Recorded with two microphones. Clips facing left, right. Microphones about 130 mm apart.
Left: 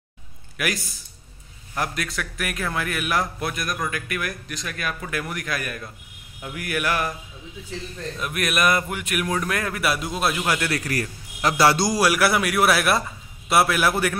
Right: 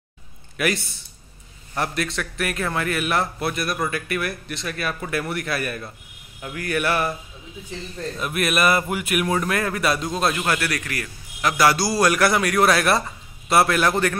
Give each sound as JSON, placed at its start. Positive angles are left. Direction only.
{"t": 0.6, "sound": "a man's voice", "side_deg": 0}
{"t": 2.1, "sound": "a man's voice", "side_deg": 0}
{"t": 8.2, "sound": "a man's voice", "side_deg": 0}
{"t": 10.7, "sound": "a man's voice", "side_deg": 35}
{"t": 11.9, "sound": "a man's voice", "side_deg": 10}